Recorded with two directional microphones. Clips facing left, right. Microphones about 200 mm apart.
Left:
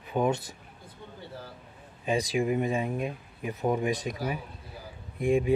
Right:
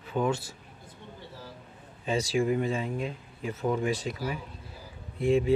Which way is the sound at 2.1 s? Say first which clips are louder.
Even; 15° left (ahead or behind).